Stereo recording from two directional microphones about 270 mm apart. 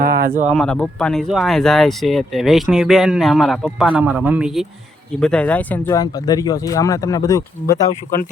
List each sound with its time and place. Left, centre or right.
0.0 s a sound: right
0.4 s speech: centre
7.9 s speech: left